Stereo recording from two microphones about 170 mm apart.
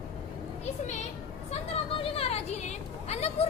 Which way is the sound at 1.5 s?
35° left (ahead or behind).